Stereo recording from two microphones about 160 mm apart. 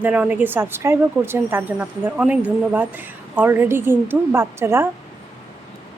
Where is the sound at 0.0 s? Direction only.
10° right (ahead or behind).